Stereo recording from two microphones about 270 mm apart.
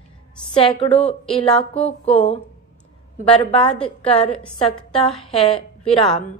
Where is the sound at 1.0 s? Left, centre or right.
Left.